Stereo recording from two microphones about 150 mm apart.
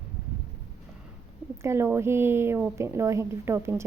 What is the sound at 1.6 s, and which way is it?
Speech, 15° right (ahead or behind).